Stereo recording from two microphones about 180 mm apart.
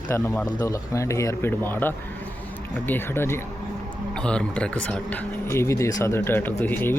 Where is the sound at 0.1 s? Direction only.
15° left (ahead or behind).